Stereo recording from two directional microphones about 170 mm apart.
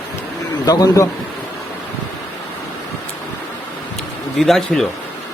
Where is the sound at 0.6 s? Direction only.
20° left (ahead or behind).